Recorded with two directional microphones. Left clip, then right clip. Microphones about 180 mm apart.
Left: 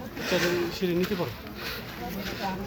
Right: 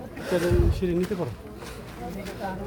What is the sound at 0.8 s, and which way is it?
Speech, 70° right (ahead or behind).